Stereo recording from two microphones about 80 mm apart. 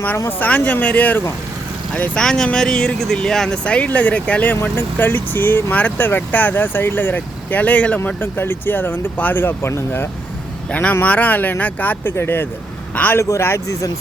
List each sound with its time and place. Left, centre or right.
0.3 s speech: left
10.7 s a man's voice: centre
13.0 s a man's voice: centre
13.4 s speech: left